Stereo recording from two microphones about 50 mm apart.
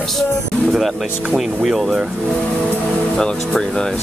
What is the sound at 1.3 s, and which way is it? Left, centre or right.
Speech, centre.